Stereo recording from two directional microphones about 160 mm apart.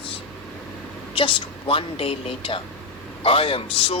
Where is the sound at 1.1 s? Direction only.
35° left (ahead or behind).